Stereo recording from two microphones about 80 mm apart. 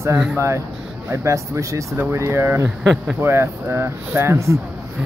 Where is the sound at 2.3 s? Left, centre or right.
Right.